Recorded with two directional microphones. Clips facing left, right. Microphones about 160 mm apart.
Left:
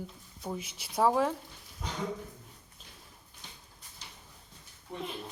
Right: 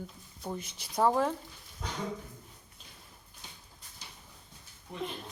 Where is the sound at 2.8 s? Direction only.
Centre (ahead or behind).